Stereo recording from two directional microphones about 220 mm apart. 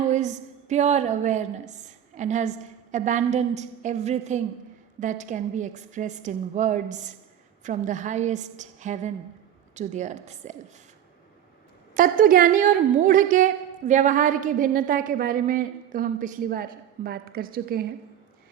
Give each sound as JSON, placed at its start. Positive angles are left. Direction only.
{"t": 0.1, "sound": "a woman's voice", "side_deg": -30}
{"t": 11.9, "sound": "a woman's voice", "side_deg": -40}